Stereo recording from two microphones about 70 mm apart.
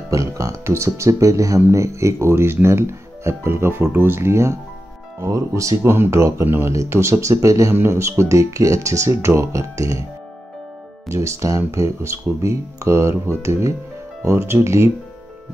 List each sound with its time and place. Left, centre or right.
0.1 s speech: right
6.7 s speech: right
7.7 s speech: right
11.1 s speech: right